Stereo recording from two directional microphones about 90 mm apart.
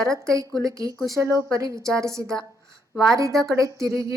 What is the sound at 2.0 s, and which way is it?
Speech, 35° right (ahead or behind).